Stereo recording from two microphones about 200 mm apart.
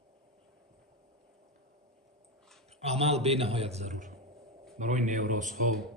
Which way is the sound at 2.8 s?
30° right (ahead or behind).